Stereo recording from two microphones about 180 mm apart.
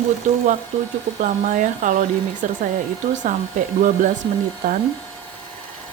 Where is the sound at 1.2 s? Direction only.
45° right (ahead or behind).